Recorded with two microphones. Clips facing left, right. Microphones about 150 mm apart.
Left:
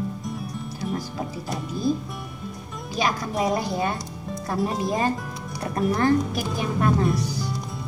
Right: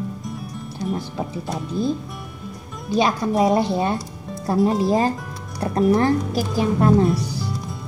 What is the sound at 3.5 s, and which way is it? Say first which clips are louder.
Speech: right 5 dB; 25° right (ahead or behind).